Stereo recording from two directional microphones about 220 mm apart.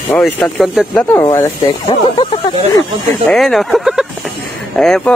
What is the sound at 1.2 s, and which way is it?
Speech, 20° left (ahead or behind).